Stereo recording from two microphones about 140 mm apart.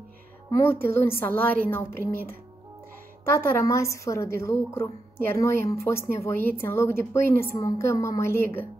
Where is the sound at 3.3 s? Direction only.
20° left (ahead or behind).